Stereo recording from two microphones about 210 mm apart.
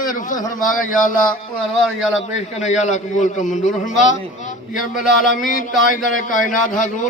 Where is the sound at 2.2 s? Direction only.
35° left (ahead or behind).